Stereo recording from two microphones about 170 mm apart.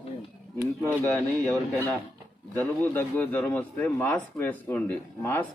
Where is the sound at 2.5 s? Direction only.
10° left (ahead or behind).